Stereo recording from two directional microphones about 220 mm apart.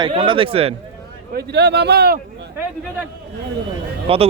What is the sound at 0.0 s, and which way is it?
Speech, 25° right (ahead or behind).